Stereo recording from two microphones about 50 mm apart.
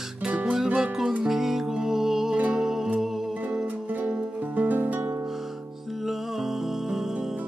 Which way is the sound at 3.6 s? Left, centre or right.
Right.